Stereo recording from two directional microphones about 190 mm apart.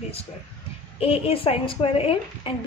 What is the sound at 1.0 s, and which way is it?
Speech, 30° left (ahead or behind).